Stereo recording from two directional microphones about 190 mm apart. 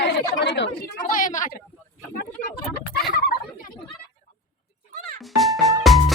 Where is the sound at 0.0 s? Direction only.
65° left (ahead or behind).